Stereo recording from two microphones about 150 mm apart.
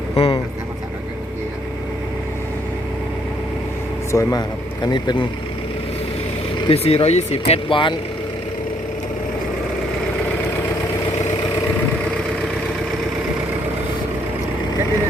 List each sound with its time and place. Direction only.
0.2 s speech: 40° left (ahead or behind)
4.1 s speech: 20° left (ahead or behind)
6.6 s speech: 40° left (ahead or behind)